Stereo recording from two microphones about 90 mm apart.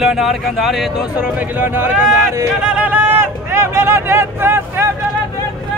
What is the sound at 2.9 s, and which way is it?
Speech, 20° right (ahead or behind).